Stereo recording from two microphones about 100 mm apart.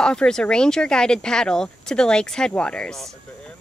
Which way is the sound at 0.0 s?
10° left (ahead or behind).